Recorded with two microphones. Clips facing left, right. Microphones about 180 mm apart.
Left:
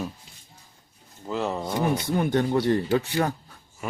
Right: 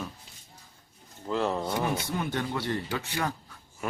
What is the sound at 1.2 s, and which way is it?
Speech, 5° left (ahead or behind).